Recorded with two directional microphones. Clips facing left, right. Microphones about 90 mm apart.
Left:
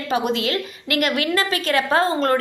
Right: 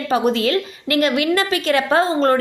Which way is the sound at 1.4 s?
35° left (ahead or behind).